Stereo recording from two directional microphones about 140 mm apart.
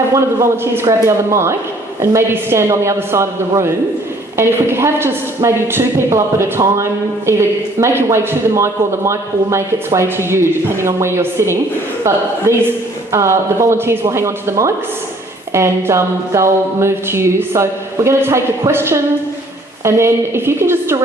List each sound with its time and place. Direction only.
0.1 s speech: 20° right (ahead or behind)